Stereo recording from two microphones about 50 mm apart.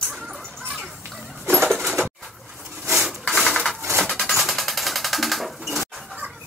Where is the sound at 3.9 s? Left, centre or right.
Centre.